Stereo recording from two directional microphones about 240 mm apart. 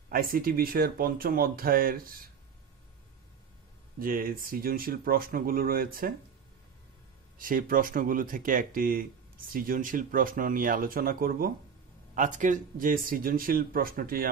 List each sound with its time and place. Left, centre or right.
0.1 s speech: right
4.0 s speech: right
7.3 s speech: right